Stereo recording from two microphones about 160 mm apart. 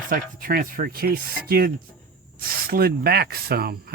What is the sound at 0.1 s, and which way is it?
Speech, 60° right (ahead or behind).